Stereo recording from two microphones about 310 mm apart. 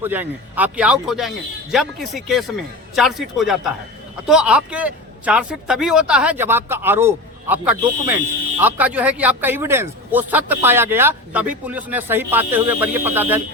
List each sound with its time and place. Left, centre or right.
0.0 s speech: centre